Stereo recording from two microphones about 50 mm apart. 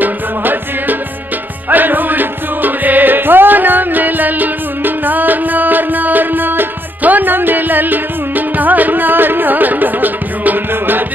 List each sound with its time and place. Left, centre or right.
0.0 s music: right